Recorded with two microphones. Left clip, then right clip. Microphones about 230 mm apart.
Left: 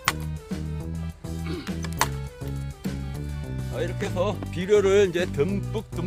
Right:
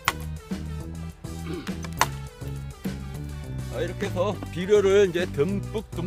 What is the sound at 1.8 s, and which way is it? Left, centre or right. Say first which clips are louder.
Music: right 2 dB; left.